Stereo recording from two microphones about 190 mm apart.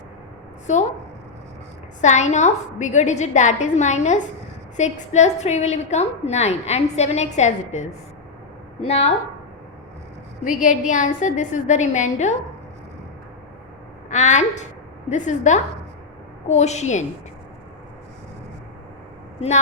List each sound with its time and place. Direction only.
0.7 s a woman's voice: 40° left (ahead or behind)
2.0 s a woman's voice: 40° left (ahead or behind)
10.6 s a woman's voice: 40° left (ahead or behind)
14.1 s a woman's voice: 40° left (ahead or behind)